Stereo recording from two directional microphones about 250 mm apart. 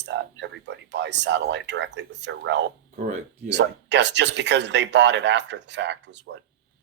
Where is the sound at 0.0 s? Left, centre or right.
Right.